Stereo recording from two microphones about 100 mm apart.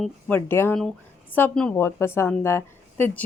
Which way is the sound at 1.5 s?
10° left (ahead or behind).